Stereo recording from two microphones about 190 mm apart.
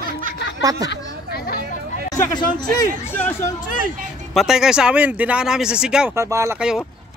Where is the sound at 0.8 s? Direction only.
55° left (ahead or behind).